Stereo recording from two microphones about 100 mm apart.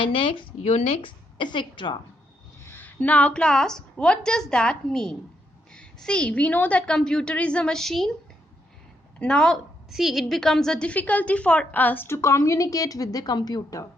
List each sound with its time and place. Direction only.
0.0 s speech: 60° left (ahead or behind); by 0.9 s 90° left
1.0 s a woman's voice: 55° left (ahead or behind)
2.6 s a woman's voice: 20° left (ahead or behind); by 8.1 s 5° left (ahead or behind)
9.1 s a woman's voice: 10° left (ahead or behind); by 13.8 s 40° left (ahead or behind)